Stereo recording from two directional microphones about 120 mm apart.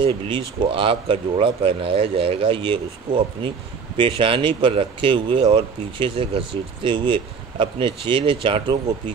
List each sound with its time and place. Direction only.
0.0 s speech: 45° right (ahead or behind)